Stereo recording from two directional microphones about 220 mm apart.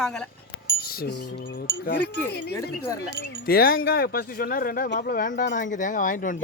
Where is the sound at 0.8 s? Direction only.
45° left (ahead or behind).